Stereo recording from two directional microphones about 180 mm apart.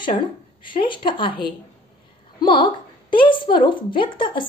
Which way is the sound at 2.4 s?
25° left (ahead or behind).